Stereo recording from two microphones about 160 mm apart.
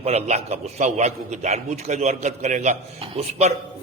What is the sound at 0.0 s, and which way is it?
A man's voice, 40° right (ahead or behind).